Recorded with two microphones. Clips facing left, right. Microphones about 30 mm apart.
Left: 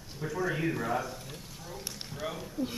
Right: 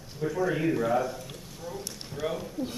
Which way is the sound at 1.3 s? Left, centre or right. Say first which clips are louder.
Right 5 dB; centre.